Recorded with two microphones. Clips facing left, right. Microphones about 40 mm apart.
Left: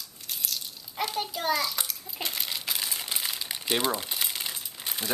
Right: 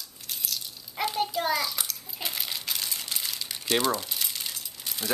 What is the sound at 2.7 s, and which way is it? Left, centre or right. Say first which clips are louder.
Crumpling: left 1 dB; centre.